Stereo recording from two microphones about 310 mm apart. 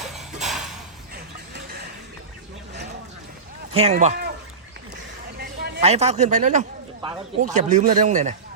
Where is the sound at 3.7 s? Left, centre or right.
Centre.